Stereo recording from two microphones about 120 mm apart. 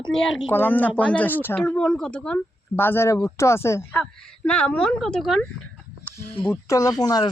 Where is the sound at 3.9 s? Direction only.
10° left (ahead or behind).